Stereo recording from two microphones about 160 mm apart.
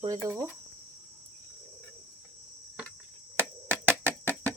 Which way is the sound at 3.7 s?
15° right (ahead or behind).